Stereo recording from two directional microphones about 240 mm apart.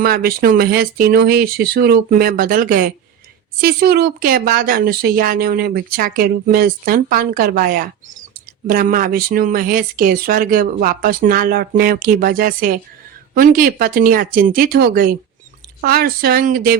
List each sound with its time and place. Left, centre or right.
0.0 s speech: right